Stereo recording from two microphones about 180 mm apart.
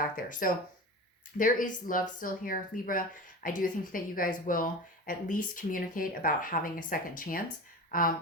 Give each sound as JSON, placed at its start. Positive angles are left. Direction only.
{"t": 0.0, "sound": "speech", "side_deg": 50}